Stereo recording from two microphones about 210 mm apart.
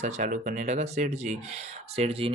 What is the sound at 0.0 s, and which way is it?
Speech, 35° right (ahead or behind).